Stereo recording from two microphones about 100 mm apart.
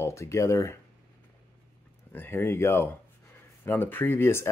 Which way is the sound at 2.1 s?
20° left (ahead or behind).